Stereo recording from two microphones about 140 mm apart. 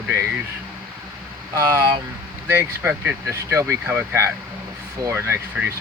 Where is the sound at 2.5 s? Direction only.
15° right (ahead or behind).